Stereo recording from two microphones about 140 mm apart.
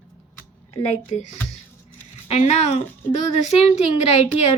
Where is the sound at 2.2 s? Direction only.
50° left (ahead or behind).